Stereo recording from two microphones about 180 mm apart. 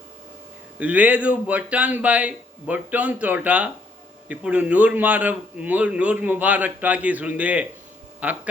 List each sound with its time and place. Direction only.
0.8 s a man's voice: 10° right (ahead or behind)